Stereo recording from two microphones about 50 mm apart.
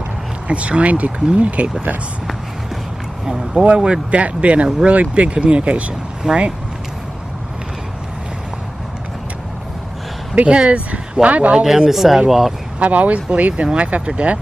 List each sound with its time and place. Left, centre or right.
0.5 s speech: right
3.3 s speech: centre
3.6 s speech: centre
10.3 s speech: right
11.6 s speech: centre
12.7 s speech: right